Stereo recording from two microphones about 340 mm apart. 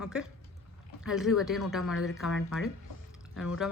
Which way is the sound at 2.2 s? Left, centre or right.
Centre.